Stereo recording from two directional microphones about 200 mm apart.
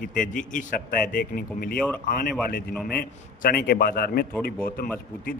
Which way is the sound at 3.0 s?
50° left (ahead or behind).